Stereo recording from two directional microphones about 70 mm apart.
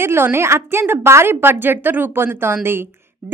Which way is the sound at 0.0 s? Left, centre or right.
Right.